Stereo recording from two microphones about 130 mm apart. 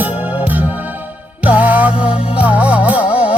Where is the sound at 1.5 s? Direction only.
10° right (ahead or behind).